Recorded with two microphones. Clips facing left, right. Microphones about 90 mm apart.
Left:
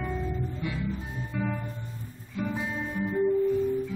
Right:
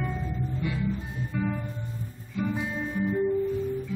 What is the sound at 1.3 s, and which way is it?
Music, 5° left (ahead or behind).